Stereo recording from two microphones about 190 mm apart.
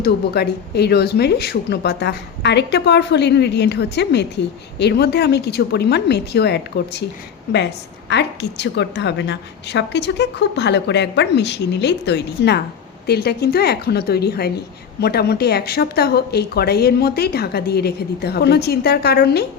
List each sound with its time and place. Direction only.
0.0 s a woman's voice: 60° left (ahead or behind)
8.1 s a woman's voice: 65° left (ahead or behind)